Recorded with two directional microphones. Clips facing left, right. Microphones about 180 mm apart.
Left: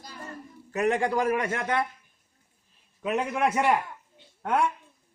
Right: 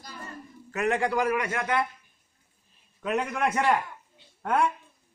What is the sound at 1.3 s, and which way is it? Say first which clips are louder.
Speech: left 1 dB; 40° left (ahead or behind).